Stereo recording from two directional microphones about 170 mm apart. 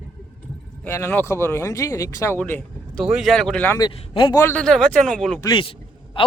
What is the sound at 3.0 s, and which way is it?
Speech, centre (ahead or behind).